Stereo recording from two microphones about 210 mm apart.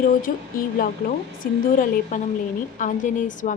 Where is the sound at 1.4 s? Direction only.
40° left (ahead or behind).